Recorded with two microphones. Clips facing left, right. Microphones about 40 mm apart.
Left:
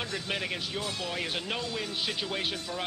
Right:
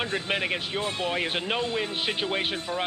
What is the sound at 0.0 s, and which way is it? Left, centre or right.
Speech, right.